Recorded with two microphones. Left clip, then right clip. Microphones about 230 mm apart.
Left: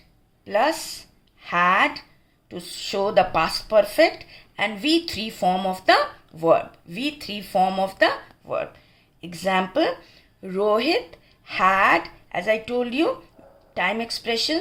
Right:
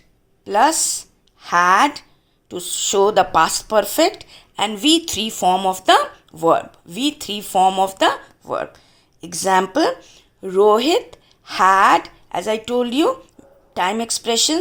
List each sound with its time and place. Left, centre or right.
0.4 s speech: right